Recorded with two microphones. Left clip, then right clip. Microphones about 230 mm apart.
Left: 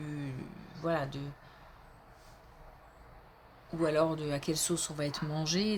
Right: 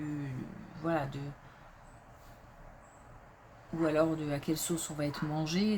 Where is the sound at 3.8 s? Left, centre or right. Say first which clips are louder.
Even; left.